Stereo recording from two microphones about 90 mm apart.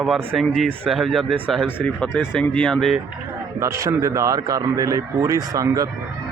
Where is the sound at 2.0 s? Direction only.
10° left (ahead or behind).